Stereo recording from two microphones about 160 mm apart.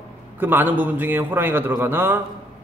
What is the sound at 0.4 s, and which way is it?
A man's voice, 10° right (ahead or behind).